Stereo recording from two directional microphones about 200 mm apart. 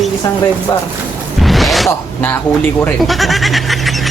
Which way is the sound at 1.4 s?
Centre (ahead or behind).